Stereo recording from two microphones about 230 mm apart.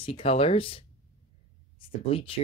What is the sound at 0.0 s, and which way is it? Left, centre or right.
Speech, left.